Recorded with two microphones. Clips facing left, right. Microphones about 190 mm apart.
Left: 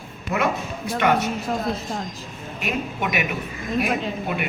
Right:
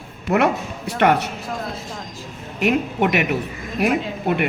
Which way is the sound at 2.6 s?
65° right (ahead or behind).